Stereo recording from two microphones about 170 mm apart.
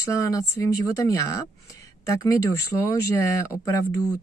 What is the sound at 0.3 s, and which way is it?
A woman's voice, 20° left (ahead or behind).